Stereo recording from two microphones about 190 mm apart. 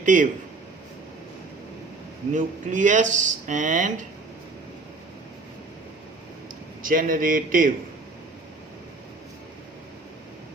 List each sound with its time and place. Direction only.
0.0 s a man's voice: 40° right (ahead or behind)
2.3 s speech: 40° right (ahead or behind)
6.8 s speech: 45° right (ahead or behind)